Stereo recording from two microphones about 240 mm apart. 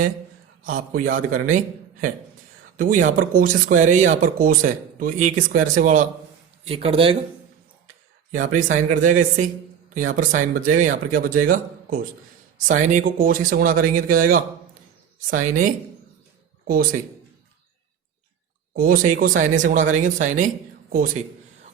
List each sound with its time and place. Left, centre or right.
0.6 s speech: right
2.7 s speech: right
8.3 s speech: right
18.7 s speech: right
20.9 s a sound: right